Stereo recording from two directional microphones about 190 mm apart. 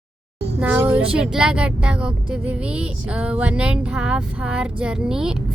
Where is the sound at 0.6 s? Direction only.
10° right (ahead or behind).